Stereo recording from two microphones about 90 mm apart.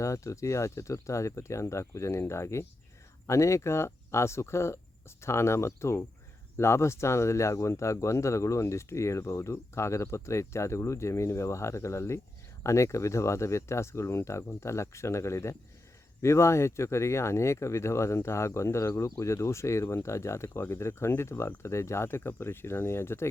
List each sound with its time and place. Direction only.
0.0 s speech: 35° left (ahead or behind)